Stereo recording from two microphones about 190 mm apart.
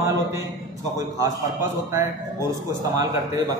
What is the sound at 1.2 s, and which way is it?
A man's voice, 15° right (ahead or behind).